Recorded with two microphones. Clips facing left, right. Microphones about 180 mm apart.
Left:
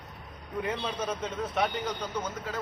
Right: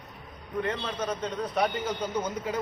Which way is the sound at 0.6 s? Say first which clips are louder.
Even; 10° left (ahead or behind).